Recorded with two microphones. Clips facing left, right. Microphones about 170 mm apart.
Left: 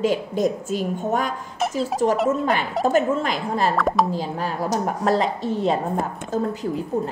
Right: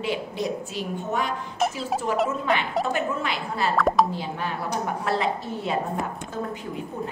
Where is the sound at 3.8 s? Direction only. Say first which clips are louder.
Right 3 dB; centre (ahead or behind).